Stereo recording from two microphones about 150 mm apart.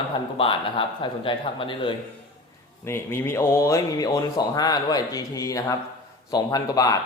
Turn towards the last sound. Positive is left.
turn(degrees=25)  # may be behind; listen again after turning